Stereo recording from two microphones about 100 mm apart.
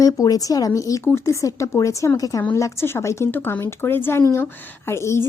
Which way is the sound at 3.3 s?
20° left (ahead or behind).